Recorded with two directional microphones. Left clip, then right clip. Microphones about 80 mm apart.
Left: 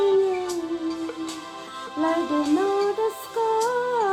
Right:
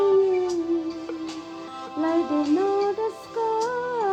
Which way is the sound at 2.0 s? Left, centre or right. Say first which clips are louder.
Even; left.